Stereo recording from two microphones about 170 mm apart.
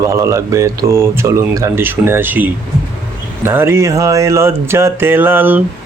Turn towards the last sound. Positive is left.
turn(degrees=-10)  # may be behind; listen again after turning